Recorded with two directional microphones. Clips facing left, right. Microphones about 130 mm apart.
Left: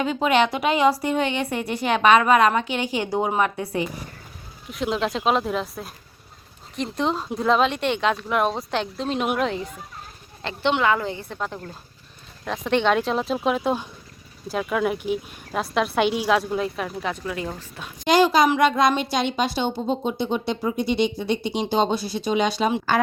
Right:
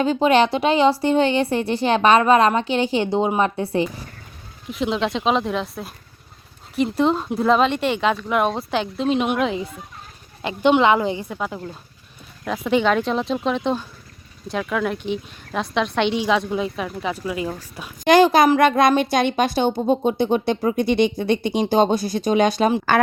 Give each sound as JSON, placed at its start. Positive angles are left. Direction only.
{"t": 0.0, "sound": "a woman's voice", "side_deg": -30}
{"t": 4.7, "sound": "speech", "side_deg": 0}
{"t": 10.4, "sound": "a woman's voice", "side_deg": -15}
{"t": 11.3, "sound": "speech", "side_deg": -5}
{"t": 18.0, "sound": "a woman's voice", "side_deg": -55}